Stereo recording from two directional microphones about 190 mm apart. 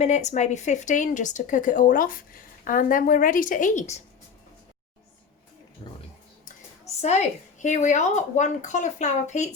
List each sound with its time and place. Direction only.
0.0 s a woman's voice: 35° left (ahead or behind)
5.8 s a sound: 30° left (ahead or behind)
7.0 s a woman's voice: 35° left (ahead or behind)